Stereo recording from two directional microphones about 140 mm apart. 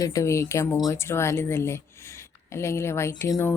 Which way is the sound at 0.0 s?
20° left (ahead or behind).